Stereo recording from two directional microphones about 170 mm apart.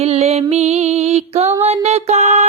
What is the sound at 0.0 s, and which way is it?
Music, 40° right (ahead or behind).